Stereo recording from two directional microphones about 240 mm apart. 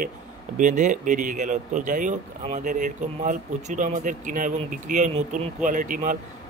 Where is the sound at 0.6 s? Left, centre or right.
Right.